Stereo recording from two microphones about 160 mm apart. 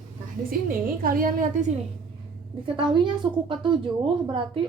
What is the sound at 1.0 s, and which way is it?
Speech, 60° right (ahead or behind).